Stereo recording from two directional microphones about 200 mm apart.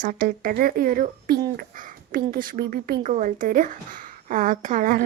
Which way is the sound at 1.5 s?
45° right (ahead or behind).